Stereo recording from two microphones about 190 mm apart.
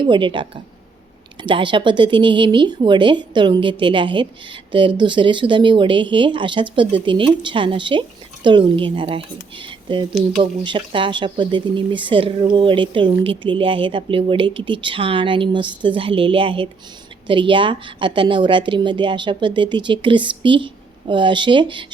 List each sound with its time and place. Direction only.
0.0 s speech: 25° right (ahead or behind)